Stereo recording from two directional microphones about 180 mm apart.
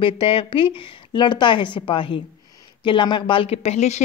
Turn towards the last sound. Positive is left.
turn(degrees=40)  # may be behind; listen again after turning